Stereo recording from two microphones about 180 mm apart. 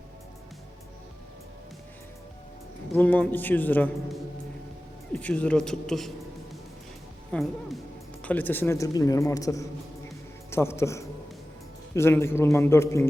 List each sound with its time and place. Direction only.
2.9 s a man's voice: 10° left (ahead or behind)
7.3 s a man's voice: centre (ahead or behind)